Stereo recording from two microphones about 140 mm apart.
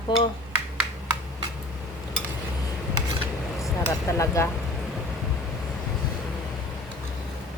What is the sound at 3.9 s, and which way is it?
Speech, 20° left (ahead or behind).